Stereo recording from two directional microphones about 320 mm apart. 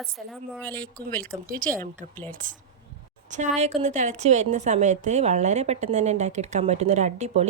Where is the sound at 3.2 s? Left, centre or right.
Right.